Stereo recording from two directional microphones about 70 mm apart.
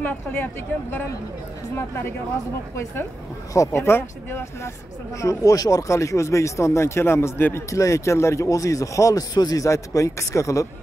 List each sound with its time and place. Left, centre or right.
0.0 s speech: left
3.5 s speech: left
3.8 s speech: left
5.2 s speech: left
7.5 s speech: left
9.3 s speech: left